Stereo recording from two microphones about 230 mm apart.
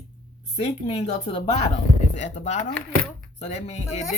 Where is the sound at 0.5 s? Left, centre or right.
Left.